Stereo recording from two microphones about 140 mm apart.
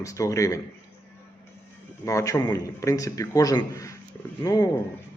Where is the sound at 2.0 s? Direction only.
25° left (ahead or behind).